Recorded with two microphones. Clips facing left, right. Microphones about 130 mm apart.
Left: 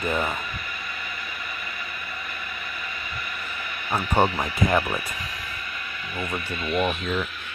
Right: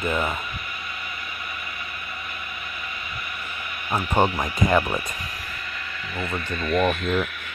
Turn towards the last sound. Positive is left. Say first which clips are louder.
# right 3 dB
turn(degrees=-45)  # may be behind; listen again after turning